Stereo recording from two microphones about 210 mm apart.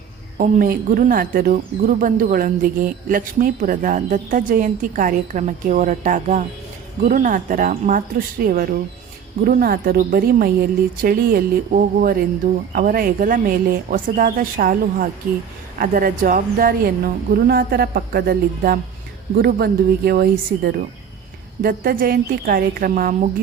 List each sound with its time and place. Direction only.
0.3 s a woman's voice: 40° right (ahead or behind)